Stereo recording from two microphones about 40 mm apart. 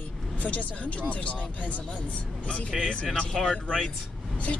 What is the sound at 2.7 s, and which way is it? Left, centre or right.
Speech, centre.